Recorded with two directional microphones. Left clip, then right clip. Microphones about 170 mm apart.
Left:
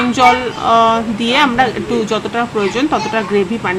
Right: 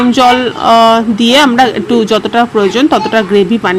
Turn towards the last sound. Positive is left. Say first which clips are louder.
# right 6 dB
turn(degrees=-40)  # may be behind; listen again after turning